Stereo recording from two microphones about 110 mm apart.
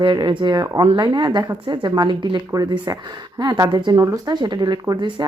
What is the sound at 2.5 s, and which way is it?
Speech, 30° right (ahead or behind).